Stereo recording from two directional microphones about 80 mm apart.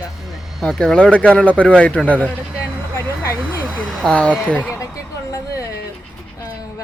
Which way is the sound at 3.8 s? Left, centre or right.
Centre.